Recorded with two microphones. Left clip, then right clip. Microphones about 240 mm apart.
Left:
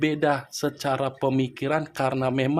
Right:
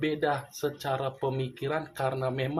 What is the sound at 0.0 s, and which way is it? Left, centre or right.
Speech, left.